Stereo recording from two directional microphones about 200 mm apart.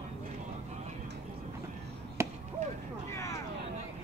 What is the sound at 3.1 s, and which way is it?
Vehicle, 15° left (ahead or behind).